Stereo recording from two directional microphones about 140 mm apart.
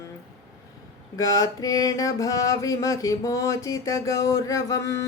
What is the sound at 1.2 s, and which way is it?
Speech, 25° left (ahead or behind).